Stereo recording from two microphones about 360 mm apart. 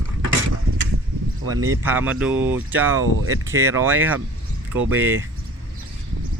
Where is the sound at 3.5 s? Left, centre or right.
Centre.